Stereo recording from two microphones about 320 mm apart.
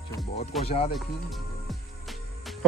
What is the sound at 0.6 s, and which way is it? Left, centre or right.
Speech, centre.